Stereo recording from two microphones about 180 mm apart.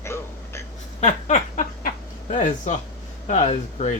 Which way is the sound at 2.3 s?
40° left (ahead or behind).